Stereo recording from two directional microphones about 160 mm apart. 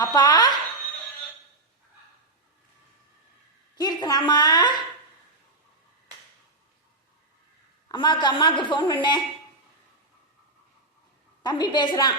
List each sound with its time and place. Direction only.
0.0 s a woman's voice: 25° left (ahead or behind)
3.8 s a woman's voice: 25° left (ahead or behind)
7.9 s a woman's voice: 30° left (ahead or behind)
11.4 s a woman's voice: 25° left (ahead or behind)